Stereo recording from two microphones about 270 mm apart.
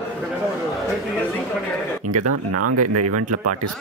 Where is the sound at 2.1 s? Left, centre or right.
Right.